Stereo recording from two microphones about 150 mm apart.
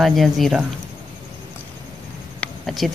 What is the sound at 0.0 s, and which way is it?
Speech, centre (ahead or behind).